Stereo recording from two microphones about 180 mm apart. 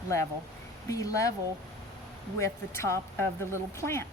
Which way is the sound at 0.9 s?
20° left (ahead or behind).